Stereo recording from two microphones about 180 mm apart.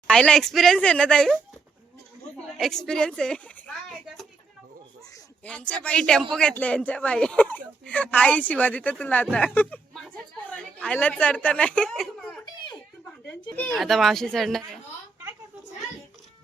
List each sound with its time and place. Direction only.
0.1 s speech: 5° left (ahead or behind)
2.6 s speech: centre (ahead or behind)
5.5 s speech: 5° left (ahead or behind)
13.7 s speech: centre (ahead or behind)